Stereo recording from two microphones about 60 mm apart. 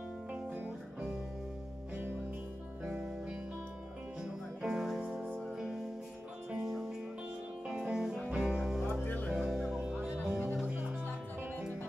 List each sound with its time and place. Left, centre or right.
0.3 s music: right
2.9 s music: centre
6.5 s music: centre
9.0 s music: left
9.3 s music: centre